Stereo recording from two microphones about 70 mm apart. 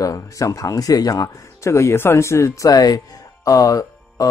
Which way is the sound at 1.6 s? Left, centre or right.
Left.